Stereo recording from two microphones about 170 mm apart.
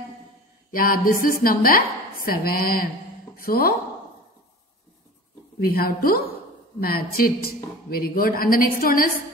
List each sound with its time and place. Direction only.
0.7 s a sound: 55° left (ahead or behind)
1.4 s a woman's voice: 60° left (ahead or behind)
5.6 s a woman's voice: 60° left (ahead or behind)